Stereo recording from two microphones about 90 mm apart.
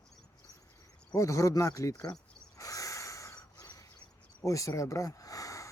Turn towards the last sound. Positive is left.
turn(degrees=40)  # may be behind; listen again after turning